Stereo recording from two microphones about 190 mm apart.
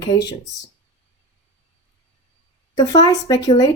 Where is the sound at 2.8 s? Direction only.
20° left (ahead or behind).